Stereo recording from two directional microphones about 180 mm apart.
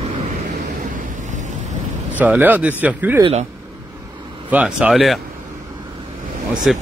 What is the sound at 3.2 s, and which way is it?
Speech, 35° right (ahead or behind).